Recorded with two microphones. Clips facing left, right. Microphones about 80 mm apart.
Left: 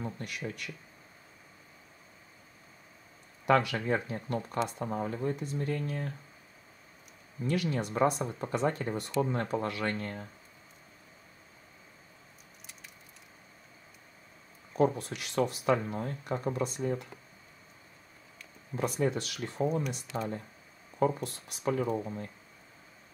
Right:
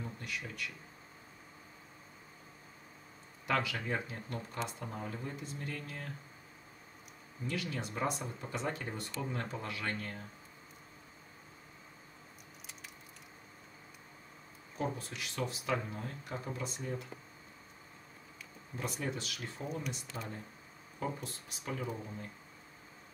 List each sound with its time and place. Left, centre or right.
0.0 s speech: left
3.4 s speech: left
5.7 s speech: left
7.4 s speech: left
9.9 s speech: left
14.8 s speech: left
18.8 s speech: left
21.2 s speech: left
21.6 s speech: left